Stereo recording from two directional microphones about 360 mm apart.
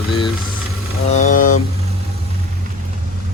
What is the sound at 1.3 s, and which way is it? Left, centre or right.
Vehicle, left.